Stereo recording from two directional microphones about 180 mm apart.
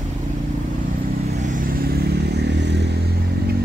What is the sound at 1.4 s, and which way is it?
Vehicle, 50° right (ahead or behind).